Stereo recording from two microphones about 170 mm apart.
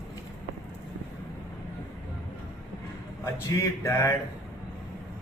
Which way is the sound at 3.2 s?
20° left (ahead or behind).